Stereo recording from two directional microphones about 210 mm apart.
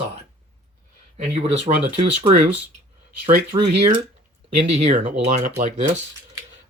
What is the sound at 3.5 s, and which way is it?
Speech, 20° right (ahead or behind).